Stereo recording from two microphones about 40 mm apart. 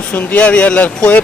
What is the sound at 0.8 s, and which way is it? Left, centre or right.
Speech, left.